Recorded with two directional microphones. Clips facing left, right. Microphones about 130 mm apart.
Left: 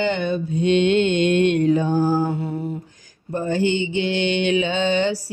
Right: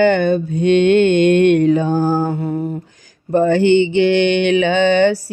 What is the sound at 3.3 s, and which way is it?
Mantra, 75° right (ahead or behind).